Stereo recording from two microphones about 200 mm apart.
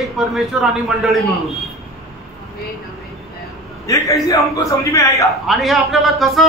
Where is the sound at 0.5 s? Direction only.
Centre (ahead or behind).